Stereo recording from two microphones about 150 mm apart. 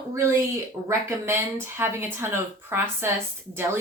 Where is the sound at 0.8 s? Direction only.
15° right (ahead or behind).